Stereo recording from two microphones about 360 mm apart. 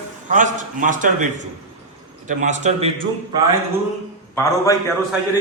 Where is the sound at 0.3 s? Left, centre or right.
Right.